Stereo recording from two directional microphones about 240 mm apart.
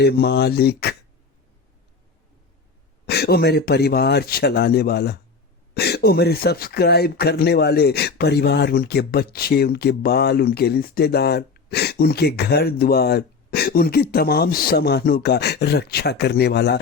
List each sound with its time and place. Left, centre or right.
0.0 s speech: left
3.1 s speech: left